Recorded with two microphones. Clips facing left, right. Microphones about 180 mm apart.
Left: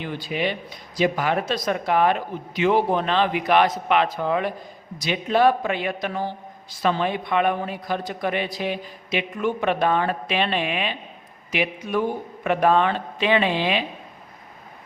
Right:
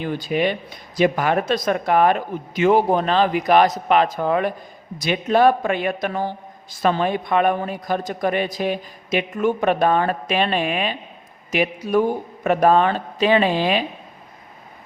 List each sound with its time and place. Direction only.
0.0 s a man's voice: 45° right (ahead or behind)